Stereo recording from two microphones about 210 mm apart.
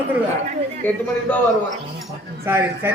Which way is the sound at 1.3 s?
10° left (ahead or behind).